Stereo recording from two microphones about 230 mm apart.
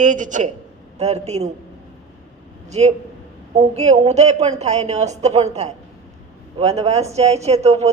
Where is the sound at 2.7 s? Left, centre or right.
Right.